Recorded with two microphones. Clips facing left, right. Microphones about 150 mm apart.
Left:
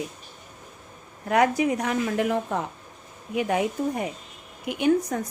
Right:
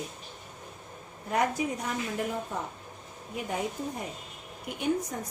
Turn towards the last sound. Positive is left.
turn(degrees=90)